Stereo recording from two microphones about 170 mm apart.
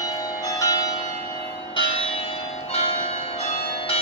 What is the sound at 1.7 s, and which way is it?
Church bell, 35° left (ahead or behind).